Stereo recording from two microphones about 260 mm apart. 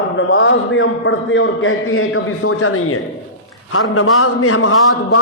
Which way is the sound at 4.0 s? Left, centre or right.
Left.